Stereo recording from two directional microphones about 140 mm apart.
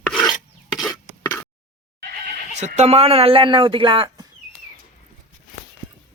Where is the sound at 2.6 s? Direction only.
50° right (ahead or behind); by 4.2 s 30° right (ahead or behind).